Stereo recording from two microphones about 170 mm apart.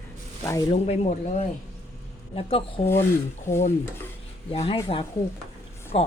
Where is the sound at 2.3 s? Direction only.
30° left (ahead or behind).